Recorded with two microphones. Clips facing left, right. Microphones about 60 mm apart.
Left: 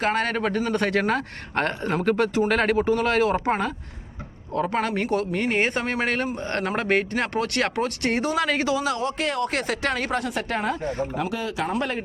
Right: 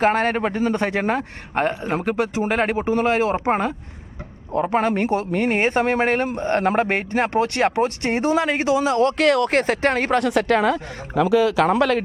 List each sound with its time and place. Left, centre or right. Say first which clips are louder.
0.0 s a man's voice: right 5 dB; right
9.0 s speech: right 8 dB; right
9.5 s speech: right 6 dB; right
10.2 s speech: right 8 dB; right
11.8 s a man's voice: right 8 dB; right